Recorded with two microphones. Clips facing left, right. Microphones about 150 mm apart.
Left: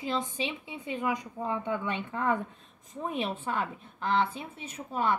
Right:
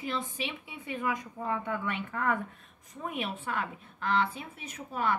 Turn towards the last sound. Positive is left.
turn(degrees=25)  # may be behind; listen again after turning